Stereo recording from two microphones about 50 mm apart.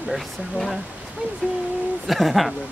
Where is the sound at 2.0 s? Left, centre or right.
Centre.